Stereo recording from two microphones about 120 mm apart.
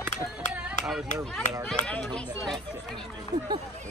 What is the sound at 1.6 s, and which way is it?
Speech, 5° left (ahead or behind).